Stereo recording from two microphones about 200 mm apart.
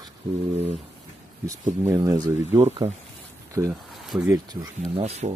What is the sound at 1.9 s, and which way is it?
Speech, 15° right (ahead or behind).